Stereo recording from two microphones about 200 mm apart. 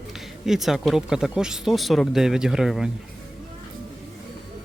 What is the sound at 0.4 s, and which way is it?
Speech, centre (ahead or behind).